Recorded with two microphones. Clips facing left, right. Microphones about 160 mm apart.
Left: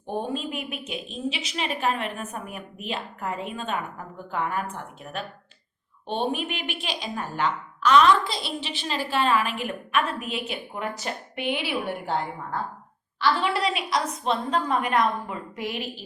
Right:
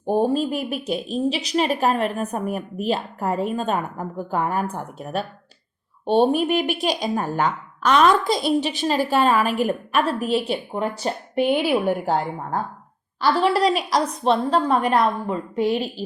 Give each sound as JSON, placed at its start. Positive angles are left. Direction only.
{"t": 0.0, "sound": "speech", "side_deg": -35}